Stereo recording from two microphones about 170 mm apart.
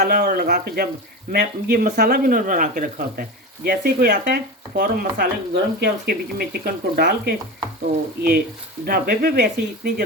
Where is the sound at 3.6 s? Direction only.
65° right (ahead or behind).